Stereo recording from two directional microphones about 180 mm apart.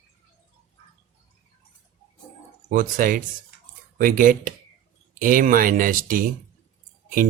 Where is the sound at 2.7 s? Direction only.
50° right (ahead or behind).